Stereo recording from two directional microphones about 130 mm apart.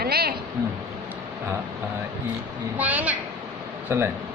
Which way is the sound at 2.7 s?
10° right (ahead or behind).